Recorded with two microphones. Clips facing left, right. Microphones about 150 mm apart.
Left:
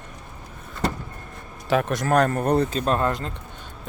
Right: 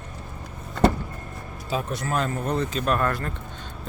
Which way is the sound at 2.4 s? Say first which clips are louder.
Left 5 dB; 35° left (ahead or behind).